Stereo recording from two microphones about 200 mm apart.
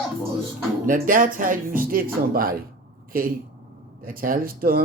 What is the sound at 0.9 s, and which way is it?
Speech, 40° right (ahead or behind).